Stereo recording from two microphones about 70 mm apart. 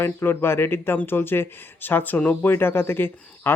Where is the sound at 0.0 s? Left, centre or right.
Left.